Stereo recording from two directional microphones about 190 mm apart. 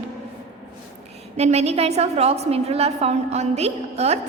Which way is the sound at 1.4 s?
35° right (ahead or behind).